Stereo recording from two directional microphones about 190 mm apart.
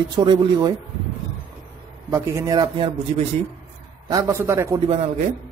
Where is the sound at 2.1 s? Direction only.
15° right (ahead or behind).